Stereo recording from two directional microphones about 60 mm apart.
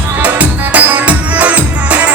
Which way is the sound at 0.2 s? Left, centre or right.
Right.